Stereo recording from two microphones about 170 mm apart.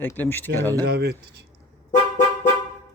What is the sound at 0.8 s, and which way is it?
Speech, 70° right (ahead or behind).